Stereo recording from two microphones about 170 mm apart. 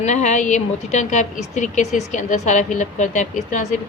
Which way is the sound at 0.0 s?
45° left (ahead or behind).